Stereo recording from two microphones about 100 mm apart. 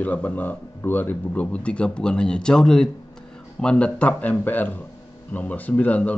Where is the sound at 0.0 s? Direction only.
15° left (ahead or behind).